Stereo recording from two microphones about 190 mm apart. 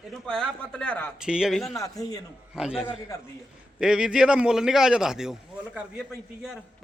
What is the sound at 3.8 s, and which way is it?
A man's voice, 5° right (ahead or behind).